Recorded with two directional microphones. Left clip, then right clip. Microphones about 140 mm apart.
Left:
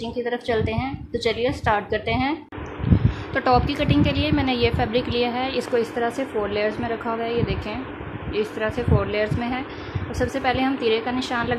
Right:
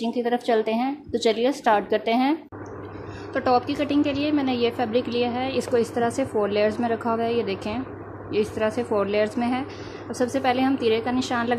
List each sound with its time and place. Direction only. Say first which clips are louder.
0.0 s a woman's voice: right 2 dB; 25° right (ahead or behind)
3.3 s a woman's voice: left 2 dB; 5° right (ahead or behind)